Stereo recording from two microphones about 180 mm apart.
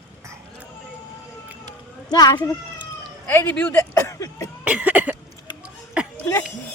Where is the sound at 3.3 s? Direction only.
10° left (ahead or behind).